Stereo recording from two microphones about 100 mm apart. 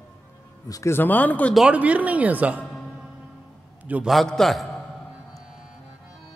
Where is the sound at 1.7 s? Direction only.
15° right (ahead or behind).